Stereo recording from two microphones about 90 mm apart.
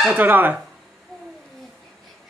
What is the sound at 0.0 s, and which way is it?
Speech, 20° right (ahead or behind).